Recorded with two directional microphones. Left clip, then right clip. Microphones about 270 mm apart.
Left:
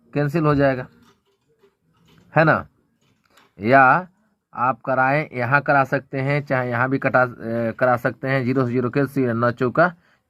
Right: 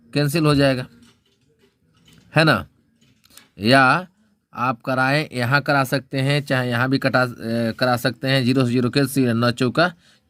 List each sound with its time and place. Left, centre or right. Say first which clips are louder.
0.1 s speech: right 1 dB; right
2.3 s speech: even; right